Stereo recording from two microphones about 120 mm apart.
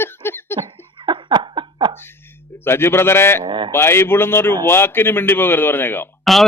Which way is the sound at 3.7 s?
20° left (ahead or behind).